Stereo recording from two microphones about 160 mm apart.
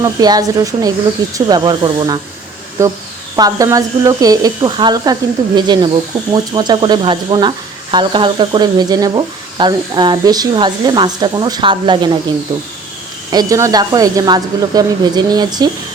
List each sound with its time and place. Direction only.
0.0 s speech: 25° right (ahead or behind)
13.3 s speech: 20° right (ahead or behind)